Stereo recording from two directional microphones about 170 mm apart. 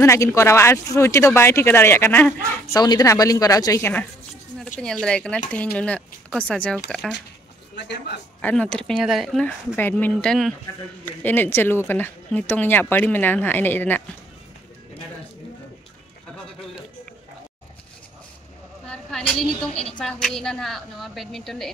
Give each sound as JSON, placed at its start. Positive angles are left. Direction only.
{"t": 0.0, "sound": "speech", "side_deg": 15}
{"t": 2.7, "sound": "a woman's voice", "side_deg": 25}
{"t": 4.7, "sound": "a woman's voice", "side_deg": 5}
{"t": 7.7, "sound": "a man's voice", "side_deg": 85}
{"t": 8.4, "sound": "a woman's voice", "side_deg": 5}
{"t": 18.9, "sound": "a sound", "side_deg": 5}
{"t": 19.9, "sound": "a woman's voice", "side_deg": 5}